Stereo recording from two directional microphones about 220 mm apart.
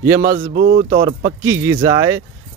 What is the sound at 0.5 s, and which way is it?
Speech, 40° right (ahead or behind).